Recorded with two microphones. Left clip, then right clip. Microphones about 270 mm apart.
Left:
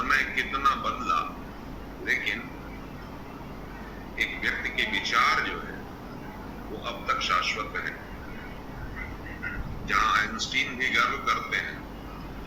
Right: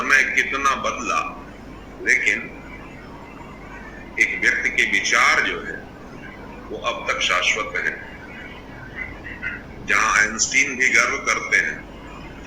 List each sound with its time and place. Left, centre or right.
0.0 s a man's voice: centre
4.1 s a man's voice: centre
6.9 s a man's voice: centre
9.0 s a sound: centre